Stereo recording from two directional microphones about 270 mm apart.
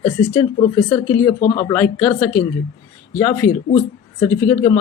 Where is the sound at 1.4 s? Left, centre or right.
Left.